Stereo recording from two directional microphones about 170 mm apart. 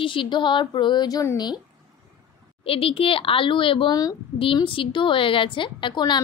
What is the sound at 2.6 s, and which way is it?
A child's voice, 35° left (ahead or behind).